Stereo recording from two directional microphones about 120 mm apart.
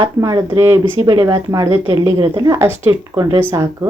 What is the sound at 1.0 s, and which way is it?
Speech, 35° right (ahead or behind).